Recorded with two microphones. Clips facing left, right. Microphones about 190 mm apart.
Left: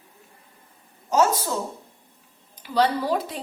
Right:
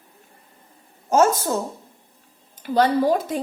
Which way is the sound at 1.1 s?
50° right (ahead or behind).